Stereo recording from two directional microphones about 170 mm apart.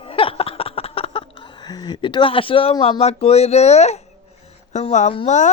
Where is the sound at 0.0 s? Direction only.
30° left (ahead or behind).